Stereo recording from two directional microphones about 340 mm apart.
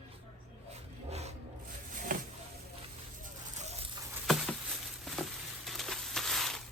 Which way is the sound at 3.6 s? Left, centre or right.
Centre.